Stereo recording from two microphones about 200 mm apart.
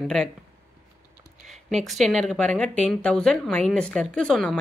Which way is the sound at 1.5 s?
Centre (ahead or behind).